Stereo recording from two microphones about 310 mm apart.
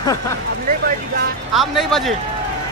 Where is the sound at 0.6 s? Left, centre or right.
Right.